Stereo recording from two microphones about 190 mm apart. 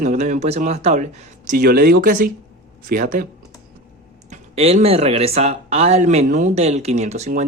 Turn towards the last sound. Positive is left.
turn(degrees=-35)  # may be behind; listen again after turning